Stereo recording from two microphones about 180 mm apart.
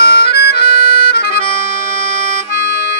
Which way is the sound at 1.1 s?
60° left (ahead or behind).